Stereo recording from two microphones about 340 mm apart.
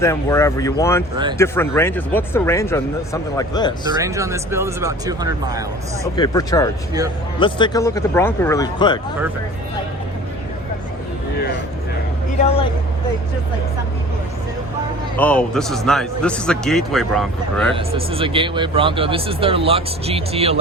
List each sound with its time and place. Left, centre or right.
0.0 s speech: centre
3.8 s speech: centre
6.1 s speech: centre
15.1 s a man's voice: centre
17.7 s speech: centre